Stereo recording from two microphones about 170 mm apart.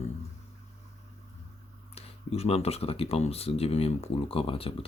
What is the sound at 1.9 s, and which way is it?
Speech, 35° left (ahead or behind).